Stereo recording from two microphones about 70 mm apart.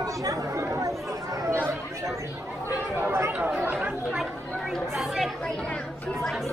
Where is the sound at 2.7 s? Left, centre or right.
Right.